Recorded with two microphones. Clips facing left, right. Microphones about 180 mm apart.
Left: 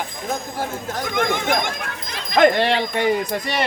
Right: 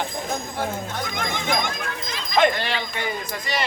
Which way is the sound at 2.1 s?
60° left (ahead or behind).